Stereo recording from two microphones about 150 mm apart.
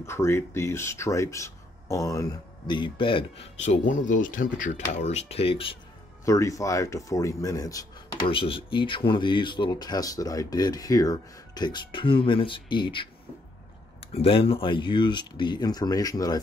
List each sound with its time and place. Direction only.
0.0 s speech: 15° left (ahead or behind); by 4.8 s 60° left (ahead or behind)
5.0 s speech: 45° left (ahead or behind)
6.2 s speech: 20° left (ahead or behind)
8.3 s speech: 35° left (ahead or behind)
14.1 s speech: 40° left (ahead or behind)